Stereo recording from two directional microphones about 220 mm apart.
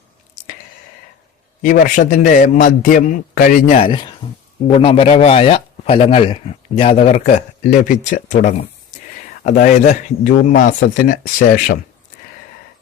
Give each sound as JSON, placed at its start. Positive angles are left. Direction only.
{"t": 1.6, "sound": "a man's voice", "side_deg": 35}